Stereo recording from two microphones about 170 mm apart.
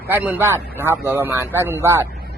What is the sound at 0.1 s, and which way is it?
Speech, 10° right (ahead or behind).